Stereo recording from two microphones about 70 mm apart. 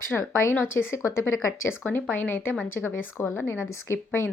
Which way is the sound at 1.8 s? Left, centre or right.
Left.